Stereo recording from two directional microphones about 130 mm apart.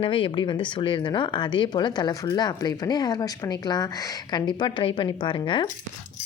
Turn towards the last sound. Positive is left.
turn(degrees=40)  # may be behind; listen again after turning